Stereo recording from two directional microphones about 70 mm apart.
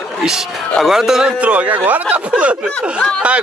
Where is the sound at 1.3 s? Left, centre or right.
Right.